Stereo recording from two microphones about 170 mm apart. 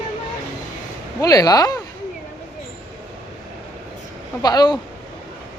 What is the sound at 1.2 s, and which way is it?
Speech, 20° left (ahead or behind).